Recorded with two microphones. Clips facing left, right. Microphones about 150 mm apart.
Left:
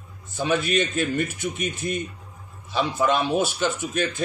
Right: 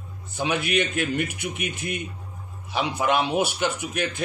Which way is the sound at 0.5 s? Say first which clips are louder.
Left 2 dB; 15° right (ahead or behind).